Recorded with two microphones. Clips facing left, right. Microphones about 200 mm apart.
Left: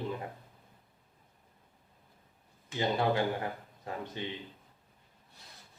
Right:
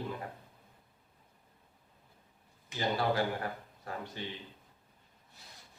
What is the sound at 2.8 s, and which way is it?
Speech, 20° left (ahead or behind).